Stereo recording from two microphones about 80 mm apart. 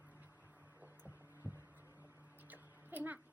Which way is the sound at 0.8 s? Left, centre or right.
Right.